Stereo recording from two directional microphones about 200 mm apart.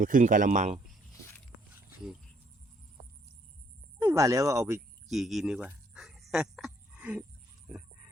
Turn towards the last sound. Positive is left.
turn(degrees=-5)  # may be behind; listen again after turning